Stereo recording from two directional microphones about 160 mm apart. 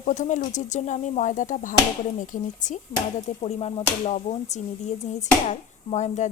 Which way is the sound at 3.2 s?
40° left (ahead or behind).